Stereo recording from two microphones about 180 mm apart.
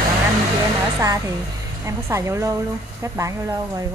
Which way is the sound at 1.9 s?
15° right (ahead or behind).